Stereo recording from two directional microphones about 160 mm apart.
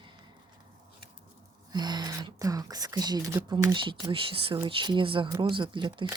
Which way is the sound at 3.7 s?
30° right (ahead or behind).